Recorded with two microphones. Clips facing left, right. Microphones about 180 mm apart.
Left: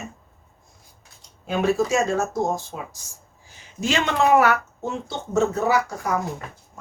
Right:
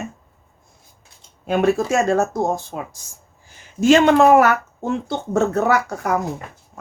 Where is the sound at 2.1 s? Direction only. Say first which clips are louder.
Right 4 dB; 60° right (ahead or behind).